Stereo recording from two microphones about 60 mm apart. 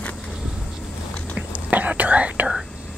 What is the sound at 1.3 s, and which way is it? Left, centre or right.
Whispering, right.